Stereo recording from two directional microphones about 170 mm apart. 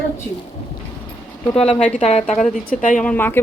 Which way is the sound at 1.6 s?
35° left (ahead or behind).